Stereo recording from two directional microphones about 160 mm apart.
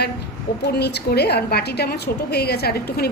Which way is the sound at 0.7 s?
90° left.